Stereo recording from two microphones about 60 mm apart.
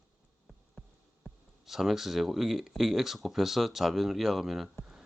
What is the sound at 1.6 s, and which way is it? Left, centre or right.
Speech, centre.